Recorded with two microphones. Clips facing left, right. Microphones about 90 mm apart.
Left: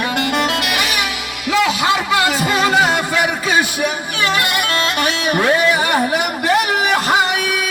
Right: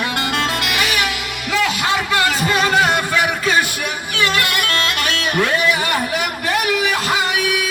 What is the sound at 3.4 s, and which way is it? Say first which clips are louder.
Bagpipes: left 2 dB; 15° left (ahead or behind).